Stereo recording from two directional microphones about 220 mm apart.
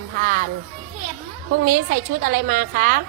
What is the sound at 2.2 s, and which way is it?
Speech, 40° right (ahead or behind).